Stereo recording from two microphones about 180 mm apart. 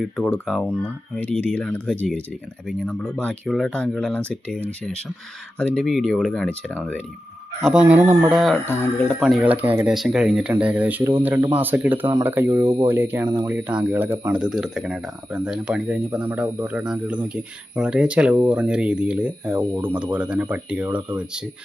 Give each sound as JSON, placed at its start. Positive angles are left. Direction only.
{"t": 0.0, "sound": "speech", "side_deg": 0}
{"t": 7.6, "sound": "speech", "side_deg": -5}
{"t": 8.6, "sound": "speech", "side_deg": 10}
{"t": 9.2, "sound": "speech", "side_deg": -5}
{"t": 12.6, "sound": "speech", "side_deg": -35}
{"t": 12.9, "sound": "speech", "side_deg": -10}